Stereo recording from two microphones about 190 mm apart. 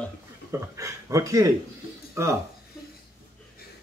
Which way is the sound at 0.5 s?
15° right (ahead or behind).